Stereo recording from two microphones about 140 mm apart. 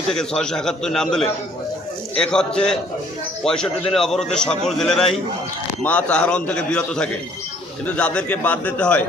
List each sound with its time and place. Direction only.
0.1 s a man's voice: 5° left (ahead or behind)